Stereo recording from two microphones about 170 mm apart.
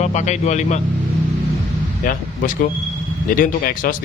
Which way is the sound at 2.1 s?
55° left (ahead or behind).